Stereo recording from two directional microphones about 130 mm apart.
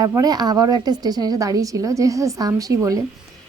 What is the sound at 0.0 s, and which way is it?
A woman's voice, 25° right (ahead or behind).